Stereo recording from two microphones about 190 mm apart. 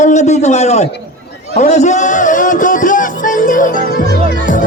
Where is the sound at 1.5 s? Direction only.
35° left (ahead or behind).